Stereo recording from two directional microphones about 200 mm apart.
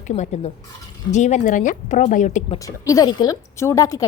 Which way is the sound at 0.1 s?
30° left (ahead or behind).